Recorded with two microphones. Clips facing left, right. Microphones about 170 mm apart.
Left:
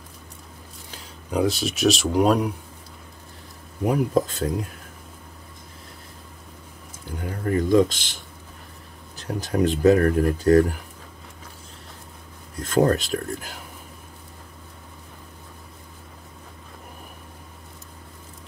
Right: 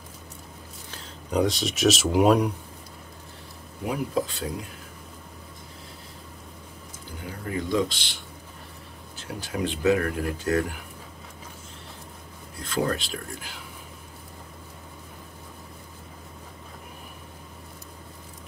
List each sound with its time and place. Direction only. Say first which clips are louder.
1.3 s speech: left 1 dB; 5° left (ahead or behind)
3.8 s speech: left 6 dB; 45° left (ahead or behind)
7.2 s speech: left 7 dB; 50° left (ahead or behind)
12.5 s speech: left 7 dB; 45° left (ahead or behind)